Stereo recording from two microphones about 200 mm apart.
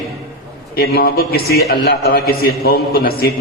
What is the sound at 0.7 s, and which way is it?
A man's voice, 50° left (ahead or behind).